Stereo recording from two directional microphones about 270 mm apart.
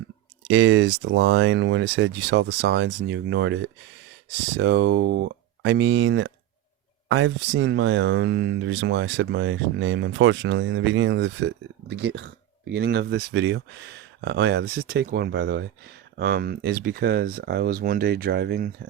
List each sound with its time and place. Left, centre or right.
0.4 s speech: right